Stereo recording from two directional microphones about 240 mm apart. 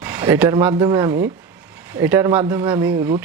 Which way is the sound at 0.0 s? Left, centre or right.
Centre.